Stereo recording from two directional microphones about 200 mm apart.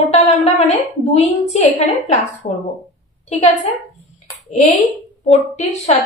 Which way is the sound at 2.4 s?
40° left (ahead or behind).